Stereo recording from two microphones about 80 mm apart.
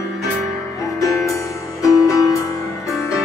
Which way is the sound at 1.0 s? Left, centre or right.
Left.